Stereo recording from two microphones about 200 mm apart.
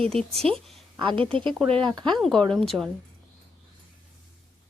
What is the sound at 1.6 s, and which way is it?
Speech, centre (ahead or behind).